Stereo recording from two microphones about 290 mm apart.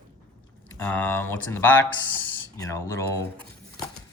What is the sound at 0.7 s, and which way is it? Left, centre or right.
Speech, centre.